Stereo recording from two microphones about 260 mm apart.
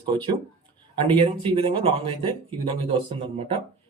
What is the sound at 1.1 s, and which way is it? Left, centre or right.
Speech, centre.